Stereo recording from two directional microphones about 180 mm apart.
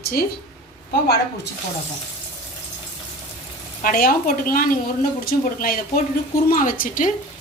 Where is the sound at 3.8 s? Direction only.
55° left (ahead or behind).